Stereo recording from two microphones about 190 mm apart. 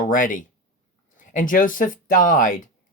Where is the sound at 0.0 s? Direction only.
45° left (ahead or behind).